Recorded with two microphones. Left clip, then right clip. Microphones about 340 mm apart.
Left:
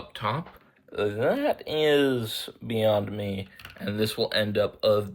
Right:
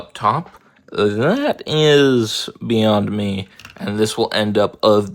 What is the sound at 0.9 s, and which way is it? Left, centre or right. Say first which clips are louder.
Speech: right 9 dB; right.